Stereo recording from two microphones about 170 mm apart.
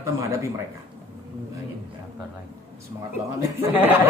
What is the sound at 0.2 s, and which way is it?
Speech, 20° right (ahead or behind).